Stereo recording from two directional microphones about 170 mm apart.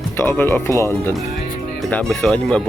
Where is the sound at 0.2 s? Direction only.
10° left (ahead or behind).